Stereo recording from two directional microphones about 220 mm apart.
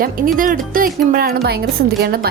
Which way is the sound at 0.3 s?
40° right (ahead or behind).